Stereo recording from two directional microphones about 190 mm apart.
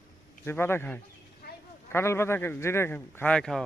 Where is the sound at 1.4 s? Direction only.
55° left (ahead or behind).